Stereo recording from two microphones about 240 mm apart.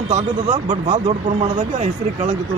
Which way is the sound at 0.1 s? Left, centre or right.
Right.